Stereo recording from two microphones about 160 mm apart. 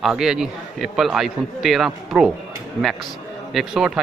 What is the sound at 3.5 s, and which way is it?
Speech, 5° right (ahead or behind).